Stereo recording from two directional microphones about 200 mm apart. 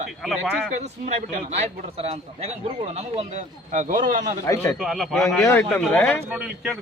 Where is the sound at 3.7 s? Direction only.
40° right (ahead or behind).